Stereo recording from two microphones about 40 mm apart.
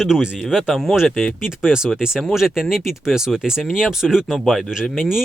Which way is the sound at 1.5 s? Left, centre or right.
Centre.